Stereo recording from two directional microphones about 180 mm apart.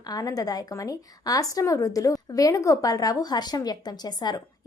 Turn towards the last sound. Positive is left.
turn(degrees=20)  # may be behind; listen again after turning